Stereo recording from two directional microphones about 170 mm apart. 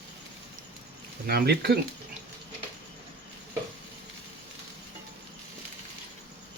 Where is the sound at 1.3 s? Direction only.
70° right (ahead or behind).